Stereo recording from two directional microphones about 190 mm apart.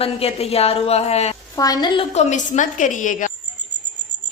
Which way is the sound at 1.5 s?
20° left (ahead or behind).